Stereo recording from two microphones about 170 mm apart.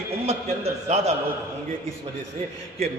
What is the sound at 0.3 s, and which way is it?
Speech, 40° right (ahead or behind).